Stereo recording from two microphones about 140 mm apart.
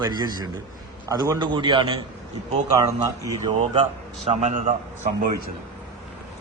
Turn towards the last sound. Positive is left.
turn(degrees=-65)  # may be behind; listen again after turning